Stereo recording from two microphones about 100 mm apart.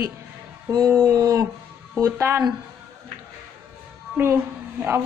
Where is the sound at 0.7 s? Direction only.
35° right (ahead or behind).